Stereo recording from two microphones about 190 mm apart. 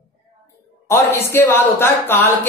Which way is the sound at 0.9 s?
10° left (ahead or behind).